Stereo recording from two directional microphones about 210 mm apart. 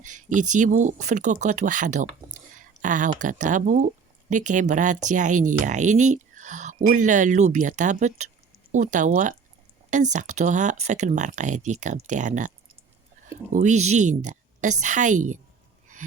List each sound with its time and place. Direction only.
0.0 s speech: 35° right (ahead or behind)
13.5 s speech: 35° right (ahead or behind)